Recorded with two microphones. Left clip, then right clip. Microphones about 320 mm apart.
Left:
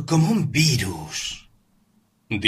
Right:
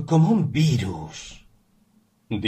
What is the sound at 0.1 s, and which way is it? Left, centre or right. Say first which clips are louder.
Speech: even; left.